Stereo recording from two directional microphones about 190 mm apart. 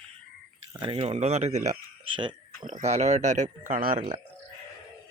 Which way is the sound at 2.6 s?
40° right (ahead or behind).